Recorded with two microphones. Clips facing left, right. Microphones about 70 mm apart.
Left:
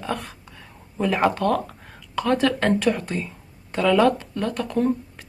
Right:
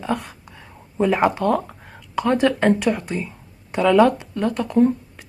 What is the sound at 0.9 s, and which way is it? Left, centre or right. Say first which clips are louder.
A woman's voice: right 3 dB; centre.